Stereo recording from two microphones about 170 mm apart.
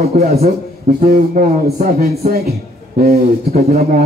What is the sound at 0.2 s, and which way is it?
A man's voice, 60° right (ahead or behind).